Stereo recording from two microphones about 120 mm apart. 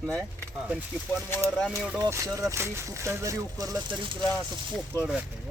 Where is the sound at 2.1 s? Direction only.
25° right (ahead or behind).